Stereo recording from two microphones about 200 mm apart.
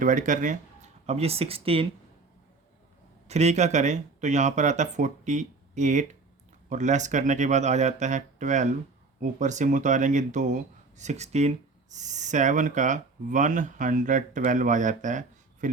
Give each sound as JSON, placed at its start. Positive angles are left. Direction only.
{"t": 0.0, "sound": "speech", "side_deg": -40}
{"t": 3.2, "sound": "speech", "side_deg": -35}